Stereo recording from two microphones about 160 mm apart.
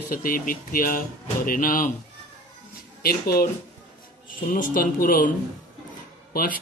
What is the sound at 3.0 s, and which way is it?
Speech, 70° left (ahead or behind).